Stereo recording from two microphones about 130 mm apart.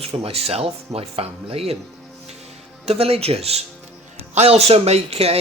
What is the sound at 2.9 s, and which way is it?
Speech, 50° right (ahead or behind).